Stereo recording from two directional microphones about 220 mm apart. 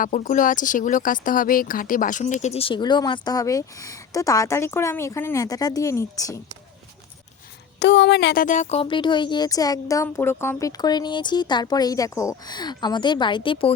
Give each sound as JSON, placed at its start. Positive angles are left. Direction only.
{"t": 0.0, "sound": "speech", "side_deg": 35}
{"t": 7.8, "sound": "speech", "side_deg": 55}